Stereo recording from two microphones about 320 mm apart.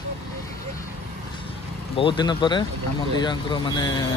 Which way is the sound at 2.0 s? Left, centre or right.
Centre.